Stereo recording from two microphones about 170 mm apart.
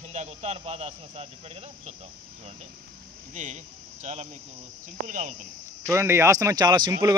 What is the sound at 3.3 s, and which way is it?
Speech, 45° right (ahead or behind).